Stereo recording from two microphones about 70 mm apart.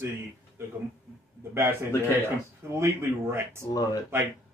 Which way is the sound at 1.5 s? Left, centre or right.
Right.